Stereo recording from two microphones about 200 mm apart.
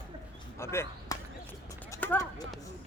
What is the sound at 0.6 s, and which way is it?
Speech, 15° left (ahead or behind).